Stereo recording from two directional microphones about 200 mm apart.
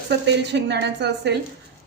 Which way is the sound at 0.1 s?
60° right (ahead or behind).